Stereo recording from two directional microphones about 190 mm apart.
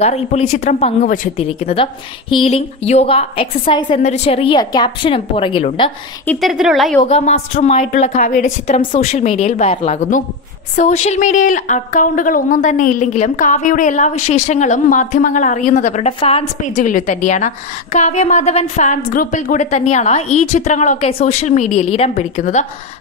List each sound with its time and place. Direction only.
0.0 s a woman's voice: 35° left (ahead or behind)
1.4 s a woman's voice: 30° left (ahead or behind)
6.2 s a woman's voice: centre (ahead or behind)
7.1 s a woman's voice: 35° left (ahead or behind)